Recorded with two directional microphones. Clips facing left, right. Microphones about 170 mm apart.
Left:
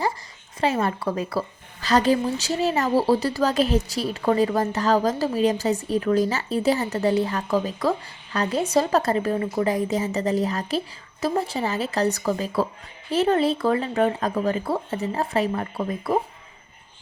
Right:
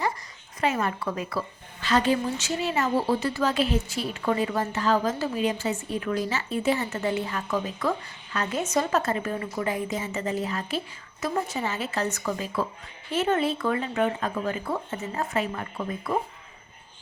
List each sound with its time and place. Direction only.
0.6 s a woman's voice: 35° left (ahead or behind)